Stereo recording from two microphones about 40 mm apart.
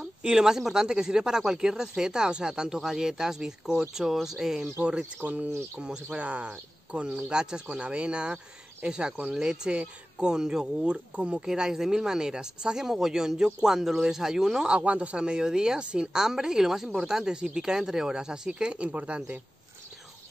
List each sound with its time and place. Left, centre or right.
0.0 s speech: centre
5.2 s speech: right; by 11.0 s centre
11.1 s speech: right
11.4 s speech: centre
14.7 s speech: right
15.2 s speech: centre
16.1 s speech: centre
18.6 s speech: right